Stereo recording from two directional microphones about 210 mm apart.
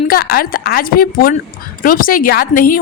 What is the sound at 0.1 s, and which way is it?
A woman's voice, 45° left (ahead or behind).